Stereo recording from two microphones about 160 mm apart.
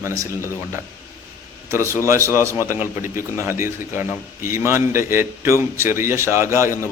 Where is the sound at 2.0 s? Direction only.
15° right (ahead or behind).